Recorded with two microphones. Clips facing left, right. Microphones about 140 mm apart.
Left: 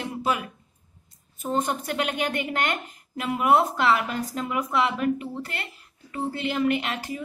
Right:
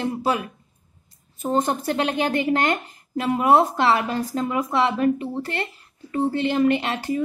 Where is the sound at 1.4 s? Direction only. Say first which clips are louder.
Right 4 dB; 35° right (ahead or behind).